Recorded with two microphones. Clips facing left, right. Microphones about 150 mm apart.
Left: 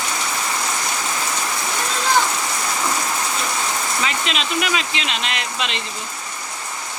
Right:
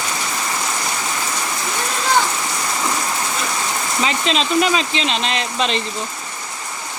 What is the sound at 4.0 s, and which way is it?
Speech, 30° right (ahead or behind).